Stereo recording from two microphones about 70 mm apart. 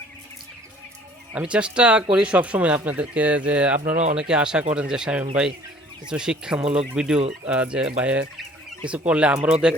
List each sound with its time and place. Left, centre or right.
1.3 s speech: centre